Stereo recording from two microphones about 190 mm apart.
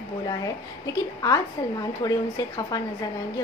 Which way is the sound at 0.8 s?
20° left (ahead or behind).